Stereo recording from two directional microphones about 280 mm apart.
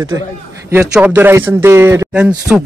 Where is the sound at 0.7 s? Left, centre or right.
Centre.